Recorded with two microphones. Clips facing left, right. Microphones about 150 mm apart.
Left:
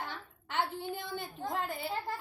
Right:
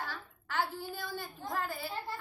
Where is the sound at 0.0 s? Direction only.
20° left (ahead or behind).